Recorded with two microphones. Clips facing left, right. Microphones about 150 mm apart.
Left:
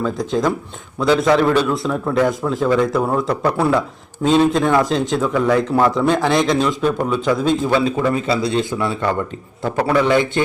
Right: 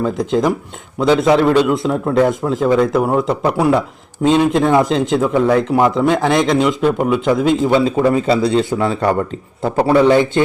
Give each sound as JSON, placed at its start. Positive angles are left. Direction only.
{"t": 0.0, "sound": "a man's voice", "side_deg": -20}
{"t": 9.6, "sound": "a man's voice", "side_deg": -30}